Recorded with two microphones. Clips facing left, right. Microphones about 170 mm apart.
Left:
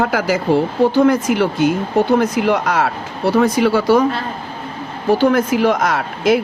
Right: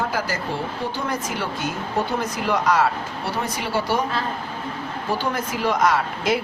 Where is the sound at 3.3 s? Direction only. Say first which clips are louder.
Left 14 dB; 90° left.